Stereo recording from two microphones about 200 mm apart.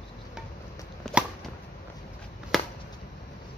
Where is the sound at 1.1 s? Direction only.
Centre (ahead or behind).